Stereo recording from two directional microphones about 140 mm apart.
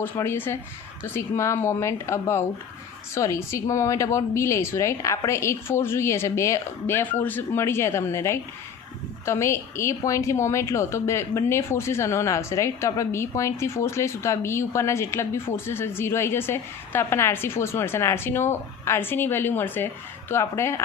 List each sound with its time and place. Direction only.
0.0 s a woman's voice: 15° left (ahead or behind)